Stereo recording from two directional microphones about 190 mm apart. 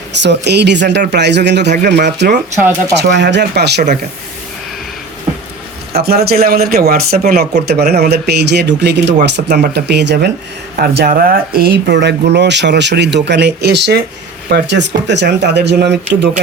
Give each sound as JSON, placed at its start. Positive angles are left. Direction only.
{"t": 0.2, "sound": "speech", "side_deg": -65}
{"t": 6.0, "sound": "speech", "side_deg": -55}
{"t": 10.8, "sound": "speech", "side_deg": -50}